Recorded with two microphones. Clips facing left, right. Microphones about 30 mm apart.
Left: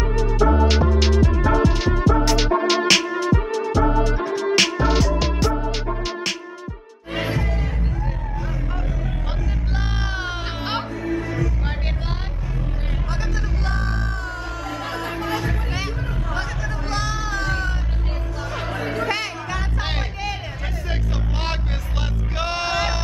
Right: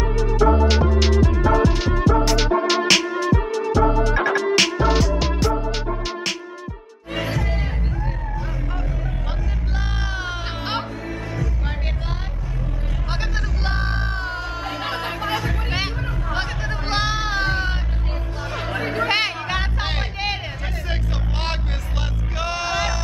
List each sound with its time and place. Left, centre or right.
0.4 s music: centre
3.3 s music: right
4.6 s music: centre
7.2 s music: centre
7.4 s music: right
9.8 s music: centre
10.6 s music: centre
13.1 s music: right
19.0 s music: right
19.8 s music: centre
22.4 s music: centre